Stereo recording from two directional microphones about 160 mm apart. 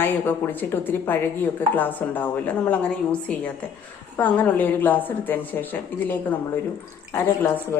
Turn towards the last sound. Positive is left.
turn(degrees=15)  # may be behind; listen again after turning